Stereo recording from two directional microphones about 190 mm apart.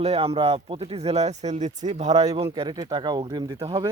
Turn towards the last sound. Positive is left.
turn(degrees=-25)  # may be behind; listen again after turning